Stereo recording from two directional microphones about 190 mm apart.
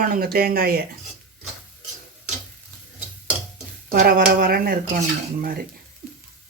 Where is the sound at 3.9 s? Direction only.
50° right (ahead or behind).